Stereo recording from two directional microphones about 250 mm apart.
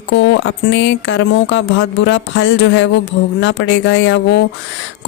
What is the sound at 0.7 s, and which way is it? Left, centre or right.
Speech, left.